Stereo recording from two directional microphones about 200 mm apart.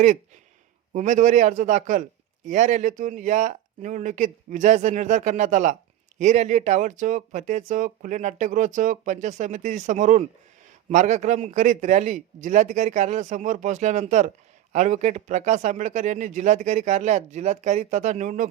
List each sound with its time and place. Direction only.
0.9 s speech: 35° right (ahead or behind)